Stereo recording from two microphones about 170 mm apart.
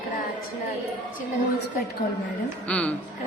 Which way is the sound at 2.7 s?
5° left (ahead or behind).